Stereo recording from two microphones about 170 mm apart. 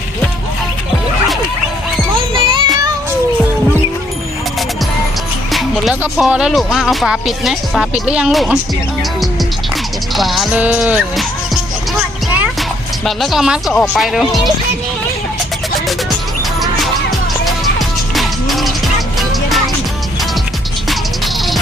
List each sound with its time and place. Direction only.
2.3 s music: 30° right (ahead or behind)
5.5 s music: centre (ahead or behind)
6.0 s speech: 5° right (ahead or behind)
10.2 s speech: centre (ahead or behind)
11.9 s music: 10° right (ahead or behind)
13.1 s speech: centre (ahead or behind)
17.4 s music: centre (ahead or behind)